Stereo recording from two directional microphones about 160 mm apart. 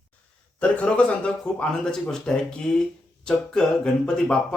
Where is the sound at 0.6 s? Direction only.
5° left (ahead or behind).